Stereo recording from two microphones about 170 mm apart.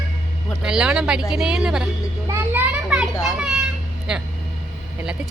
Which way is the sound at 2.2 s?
10° right (ahead or behind).